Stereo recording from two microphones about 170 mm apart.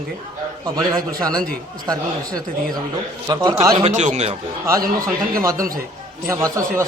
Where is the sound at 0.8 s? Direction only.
25° right (ahead or behind).